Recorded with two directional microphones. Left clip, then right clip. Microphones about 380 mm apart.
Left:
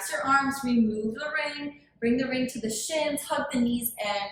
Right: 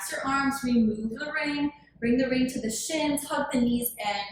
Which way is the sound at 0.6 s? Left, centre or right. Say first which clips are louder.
Even; centre.